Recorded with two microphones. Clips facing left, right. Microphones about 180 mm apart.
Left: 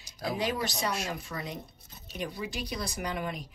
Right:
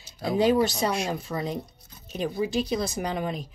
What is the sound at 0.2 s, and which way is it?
A woman's voice, 30° right (ahead or behind).